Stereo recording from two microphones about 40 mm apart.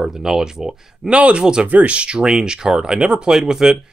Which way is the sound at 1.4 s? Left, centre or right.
Right.